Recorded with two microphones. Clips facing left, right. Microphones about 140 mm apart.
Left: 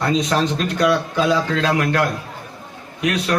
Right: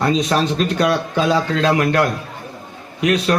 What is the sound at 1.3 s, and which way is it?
Speech, 30° right (ahead or behind).